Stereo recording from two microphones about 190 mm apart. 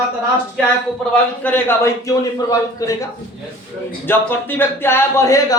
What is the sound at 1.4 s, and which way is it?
Speech, 10° left (ahead or behind).